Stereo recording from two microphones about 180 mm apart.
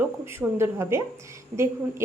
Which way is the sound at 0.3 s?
15° right (ahead or behind).